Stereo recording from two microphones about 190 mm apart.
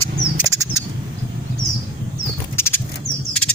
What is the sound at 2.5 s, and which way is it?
Bird flight, 10° left (ahead or behind).